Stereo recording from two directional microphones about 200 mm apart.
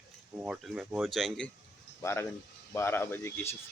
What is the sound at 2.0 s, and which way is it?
Speech, 15° left (ahead or behind).